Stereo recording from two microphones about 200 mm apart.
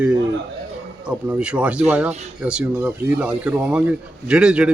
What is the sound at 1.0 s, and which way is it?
Speech, 5° right (ahead or behind).